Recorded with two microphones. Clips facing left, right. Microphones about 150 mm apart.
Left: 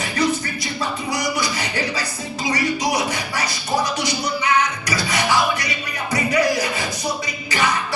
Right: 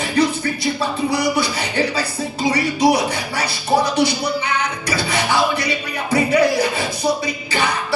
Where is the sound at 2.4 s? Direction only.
30° right (ahead or behind).